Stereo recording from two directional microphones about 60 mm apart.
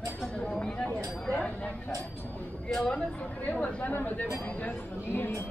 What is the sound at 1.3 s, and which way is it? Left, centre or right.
Chink, left.